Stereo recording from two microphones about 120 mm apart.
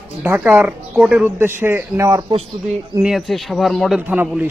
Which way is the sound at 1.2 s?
20° right (ahead or behind).